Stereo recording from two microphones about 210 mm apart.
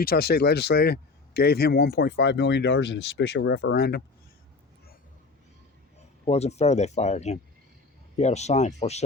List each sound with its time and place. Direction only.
0.0 s speech: 45° left (ahead or behind)
6.2 s speech: 30° left (ahead or behind)